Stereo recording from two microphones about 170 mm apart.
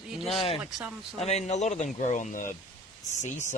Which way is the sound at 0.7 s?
5° right (ahead or behind).